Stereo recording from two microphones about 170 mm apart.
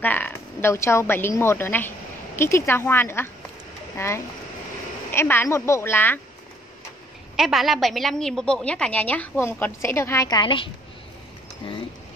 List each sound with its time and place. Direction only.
0.0 s a woman's voice: 10° left (ahead or behind)
7.3 s a woman's voice: centre (ahead or behind); by 10.7 s 30° left (ahead or behind)